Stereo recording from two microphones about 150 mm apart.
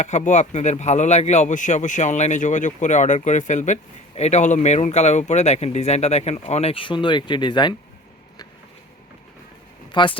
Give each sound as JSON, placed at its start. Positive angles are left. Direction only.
{"t": 0.0, "sound": "speech", "side_deg": 55}
{"t": 9.9, "sound": "speech", "side_deg": 30}